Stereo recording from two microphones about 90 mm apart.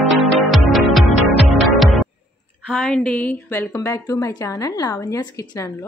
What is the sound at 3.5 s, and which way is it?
Speech, 35° left (ahead or behind).